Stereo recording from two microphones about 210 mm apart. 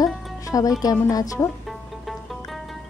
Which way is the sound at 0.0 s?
15° left (ahead or behind).